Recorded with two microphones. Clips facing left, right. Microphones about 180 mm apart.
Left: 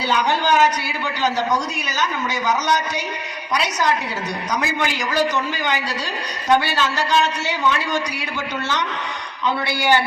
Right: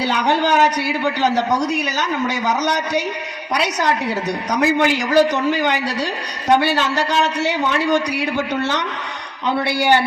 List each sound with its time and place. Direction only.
0.0 s a man's voice: 65° right (ahead or behind)